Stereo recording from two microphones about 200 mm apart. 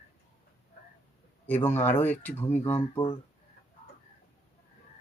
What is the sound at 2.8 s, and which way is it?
Speech, 25° left (ahead or behind).